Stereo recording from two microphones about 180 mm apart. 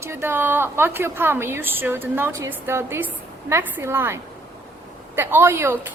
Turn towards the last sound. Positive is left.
turn(degrees=-15)  # may be behind; listen again after turning